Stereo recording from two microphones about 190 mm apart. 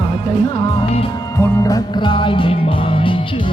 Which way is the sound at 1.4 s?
20° left (ahead or behind).